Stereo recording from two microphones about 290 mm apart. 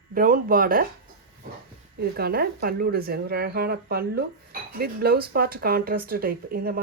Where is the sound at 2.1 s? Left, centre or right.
Right.